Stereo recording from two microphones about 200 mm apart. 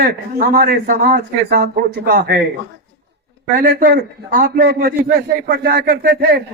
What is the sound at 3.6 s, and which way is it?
A man's voice, 45° right (ahead or behind).